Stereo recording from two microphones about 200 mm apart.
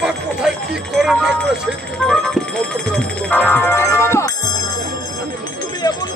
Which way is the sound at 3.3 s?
5° left (ahead or behind).